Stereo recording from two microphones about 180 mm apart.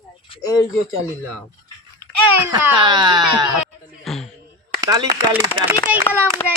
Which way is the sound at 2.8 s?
25° right (ahead or behind).